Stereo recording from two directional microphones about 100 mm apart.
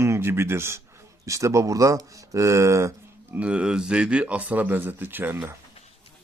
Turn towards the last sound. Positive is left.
turn(degrees=-20)  # may be behind; listen again after turning